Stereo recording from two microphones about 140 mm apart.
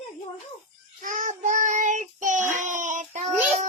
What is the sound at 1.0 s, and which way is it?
Child singing, 65° right (ahead or behind).